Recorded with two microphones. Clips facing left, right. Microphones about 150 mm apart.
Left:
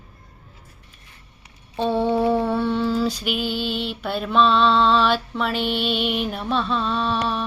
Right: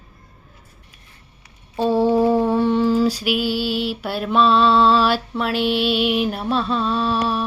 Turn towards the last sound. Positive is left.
turn(degrees=-10)  # may be behind; listen again after turning